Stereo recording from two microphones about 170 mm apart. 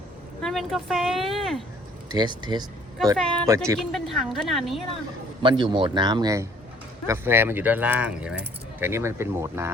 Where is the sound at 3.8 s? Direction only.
Centre (ahead or behind).